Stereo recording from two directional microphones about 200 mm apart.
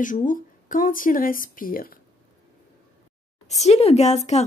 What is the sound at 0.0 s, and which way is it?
Speech, 40° left (ahead or behind).